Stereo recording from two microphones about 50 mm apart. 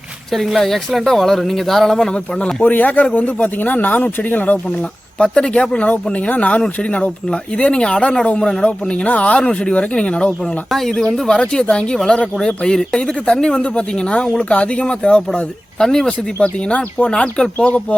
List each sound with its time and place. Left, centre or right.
0.3 s speech: centre
2.6 s speech: left
4.8 s speech: centre
8.9 s speech: left
10.7 s speech: centre
10.9 s speech: centre